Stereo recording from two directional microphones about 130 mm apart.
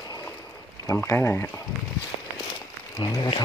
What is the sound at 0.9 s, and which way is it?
Speech, 20° left (ahead or behind).